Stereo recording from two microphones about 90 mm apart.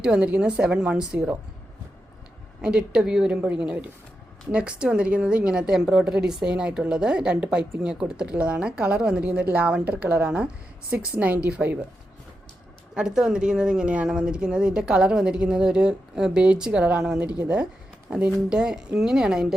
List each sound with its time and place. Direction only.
0.0 s speech: 10° right (ahead or behind)
2.6 s speech: 10° right (ahead or behind)
12.9 s speech: 5° right (ahead or behind)